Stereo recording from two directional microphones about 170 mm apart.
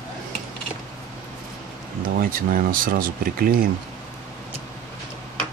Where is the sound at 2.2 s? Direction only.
55° right (ahead or behind).